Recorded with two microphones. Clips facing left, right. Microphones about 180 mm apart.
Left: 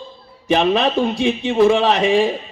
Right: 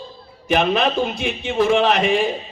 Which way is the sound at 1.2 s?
30° left (ahead or behind).